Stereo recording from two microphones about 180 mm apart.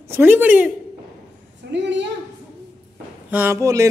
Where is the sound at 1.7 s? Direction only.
80° right.